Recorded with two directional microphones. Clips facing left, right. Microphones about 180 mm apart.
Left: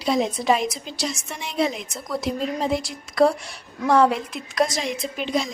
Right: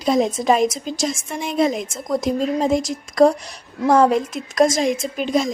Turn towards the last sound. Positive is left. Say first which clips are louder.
# right 5 dB
turn(degrees=-45)  # may be behind; listen again after turning